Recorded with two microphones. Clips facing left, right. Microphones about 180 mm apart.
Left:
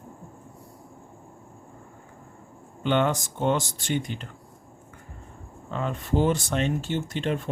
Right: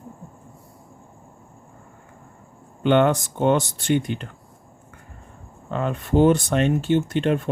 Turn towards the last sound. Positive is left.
turn(degrees=-60)  # may be behind; listen again after turning